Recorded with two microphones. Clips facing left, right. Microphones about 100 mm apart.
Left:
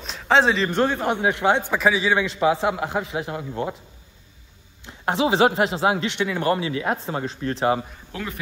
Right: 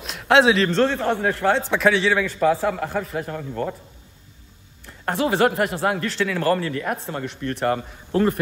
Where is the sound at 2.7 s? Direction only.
15° left (ahead or behind).